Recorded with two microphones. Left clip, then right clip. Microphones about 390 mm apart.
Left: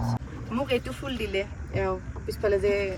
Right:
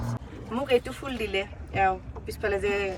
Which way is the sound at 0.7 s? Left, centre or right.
Centre.